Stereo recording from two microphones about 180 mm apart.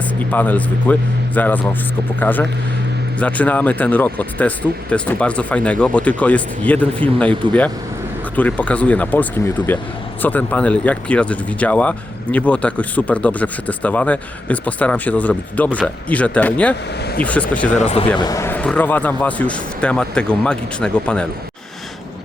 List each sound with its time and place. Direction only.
0.2 s speech: 10° left (ahead or behind)
17.7 s speech: 35° left (ahead or behind)
18.2 s speech: 20° left (ahead or behind)